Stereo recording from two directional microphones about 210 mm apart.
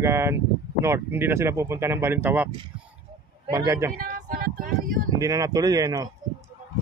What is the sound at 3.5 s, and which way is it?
Speech, 15° right (ahead or behind).